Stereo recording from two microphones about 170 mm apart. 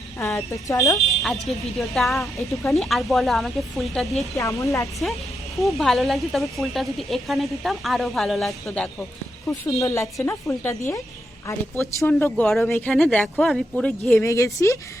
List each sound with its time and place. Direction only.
0.5 s speech: 20° left (ahead or behind)
0.9 s speech: centre (ahead or behind)
4.4 s speech: 20° left (ahead or behind)
5.5 s speech: centre (ahead or behind)
9.5 s speech: 20° left (ahead or behind); by 13.9 s centre (ahead or behind)
14.0 s speech: 10° left (ahead or behind)